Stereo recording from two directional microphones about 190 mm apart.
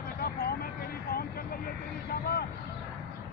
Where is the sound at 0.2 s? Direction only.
55° left (ahead or behind).